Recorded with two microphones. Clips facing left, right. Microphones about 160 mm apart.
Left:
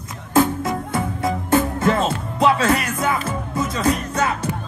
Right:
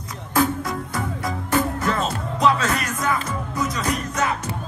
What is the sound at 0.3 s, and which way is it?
Music, 25° left (ahead or behind).